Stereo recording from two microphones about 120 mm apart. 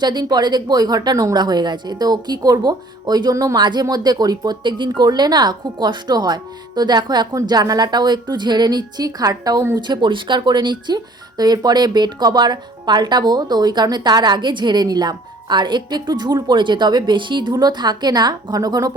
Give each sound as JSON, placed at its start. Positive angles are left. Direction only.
{"t": 0.0, "sound": "speech", "side_deg": -35}
{"t": 9.8, "sound": "speech", "side_deg": -40}